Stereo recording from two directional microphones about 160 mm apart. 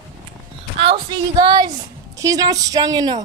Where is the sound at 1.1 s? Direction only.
25° right (ahead or behind).